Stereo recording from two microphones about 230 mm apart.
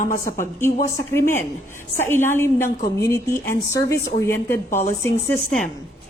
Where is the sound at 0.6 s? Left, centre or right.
Centre.